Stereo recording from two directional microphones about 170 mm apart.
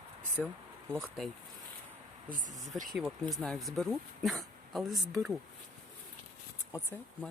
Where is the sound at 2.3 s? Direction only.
50° right (ahead or behind).